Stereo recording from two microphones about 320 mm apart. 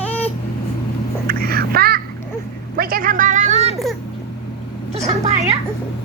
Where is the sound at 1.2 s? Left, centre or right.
Right.